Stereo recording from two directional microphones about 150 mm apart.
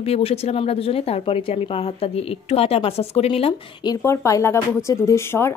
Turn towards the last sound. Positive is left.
turn(degrees=15)  # may be behind; listen again after turning